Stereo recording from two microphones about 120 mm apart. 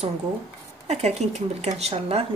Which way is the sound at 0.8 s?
70° right (ahead or behind).